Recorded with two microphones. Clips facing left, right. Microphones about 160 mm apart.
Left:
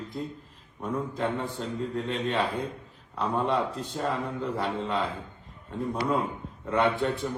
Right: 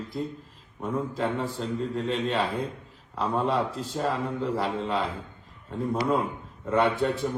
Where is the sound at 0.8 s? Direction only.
5° right (ahead or behind).